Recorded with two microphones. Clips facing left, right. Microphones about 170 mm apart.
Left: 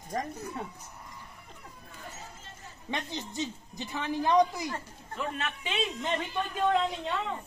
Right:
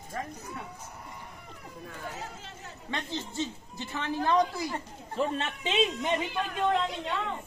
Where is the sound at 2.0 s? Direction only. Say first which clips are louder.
Right 5 dB; 90° right.